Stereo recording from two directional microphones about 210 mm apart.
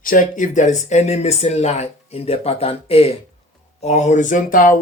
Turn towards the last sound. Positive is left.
turn(degrees=40)  # may be behind; listen again after turning